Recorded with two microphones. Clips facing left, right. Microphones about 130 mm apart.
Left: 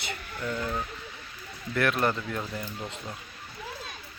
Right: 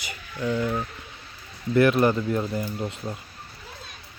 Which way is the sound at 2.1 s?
20° right (ahead or behind).